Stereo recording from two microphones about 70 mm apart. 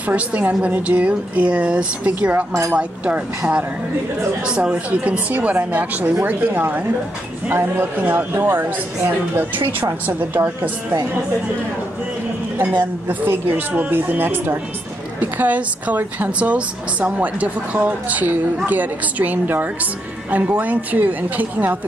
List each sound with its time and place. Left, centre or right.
0.0 s a woman's voice: right
12.5 s a woman's voice: right